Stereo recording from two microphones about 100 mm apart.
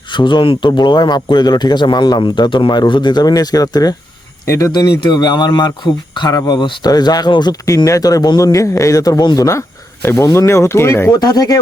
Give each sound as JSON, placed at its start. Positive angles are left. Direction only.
{"t": 0.1, "sound": "a man's voice", "side_deg": 50}
{"t": 4.4, "sound": "speech", "side_deg": 30}
{"t": 4.7, "sound": "a man's voice", "side_deg": 45}
{"t": 7.9, "sound": "speech", "side_deg": 35}
{"t": 8.5, "sound": "speech", "side_deg": 30}
{"t": 11.1, "sound": "speech", "side_deg": 40}